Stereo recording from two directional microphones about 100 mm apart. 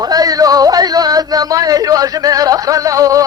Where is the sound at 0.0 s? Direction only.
40° right (ahead or behind).